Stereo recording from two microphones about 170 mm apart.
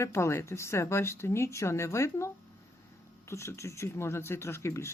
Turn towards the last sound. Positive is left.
turn(degrees=15)  # may be behind; listen again after turning